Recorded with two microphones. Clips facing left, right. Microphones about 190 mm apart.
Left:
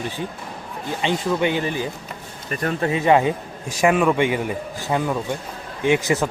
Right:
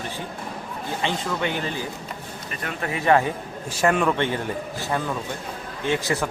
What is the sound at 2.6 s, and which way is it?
Speech, 25° left (ahead or behind).